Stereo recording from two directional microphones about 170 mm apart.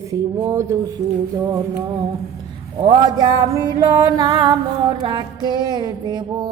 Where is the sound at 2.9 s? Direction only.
25° right (ahead or behind).